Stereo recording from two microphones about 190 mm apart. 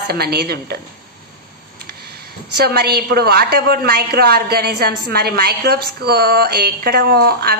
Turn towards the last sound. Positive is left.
turn(degrees=-55)  # may be behind; listen again after turning